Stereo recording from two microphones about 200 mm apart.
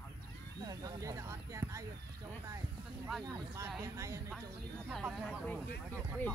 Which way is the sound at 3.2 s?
15° right (ahead or behind).